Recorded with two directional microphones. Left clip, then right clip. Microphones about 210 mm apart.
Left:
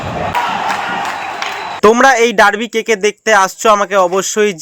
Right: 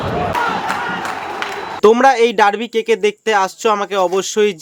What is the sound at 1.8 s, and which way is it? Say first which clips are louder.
Speech: left 2 dB; 15° left (ahead or behind).